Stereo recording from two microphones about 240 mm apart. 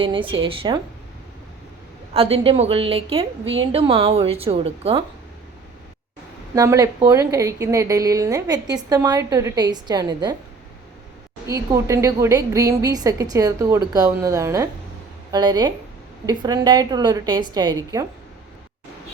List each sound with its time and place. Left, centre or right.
0.0 s a woman's voice: right
2.1 s a woman's voice: right
6.5 s a woman's voice: centre
11.4 s a woman's voice: centre